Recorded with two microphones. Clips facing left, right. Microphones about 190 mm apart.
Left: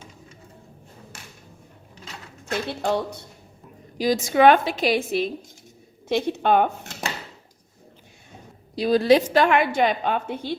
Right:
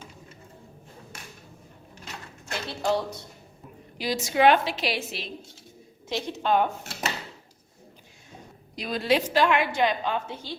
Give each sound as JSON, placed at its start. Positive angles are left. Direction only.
{"t": 2.5, "sound": "a woman's voice", "side_deg": 55}
{"t": 3.9, "sound": "a woman's voice", "side_deg": 45}
{"t": 8.7, "sound": "a woman's voice", "side_deg": 35}